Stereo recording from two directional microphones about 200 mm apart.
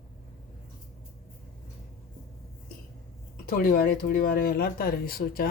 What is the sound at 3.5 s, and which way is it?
Speech, 45° left (ahead or behind).